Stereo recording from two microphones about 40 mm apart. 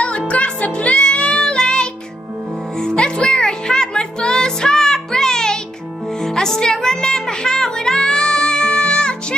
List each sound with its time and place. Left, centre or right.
0.3 s music: left